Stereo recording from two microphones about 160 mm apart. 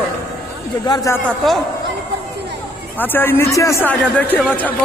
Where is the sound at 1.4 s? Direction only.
Centre (ahead or behind).